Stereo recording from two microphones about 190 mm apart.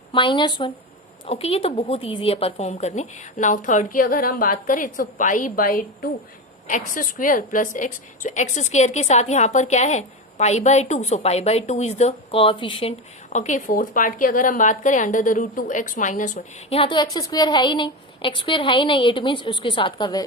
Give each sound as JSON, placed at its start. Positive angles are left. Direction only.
{"t": 0.1, "sound": "a woman's voice", "side_deg": 25}
{"t": 13.3, "sound": "a woman's voice", "side_deg": 40}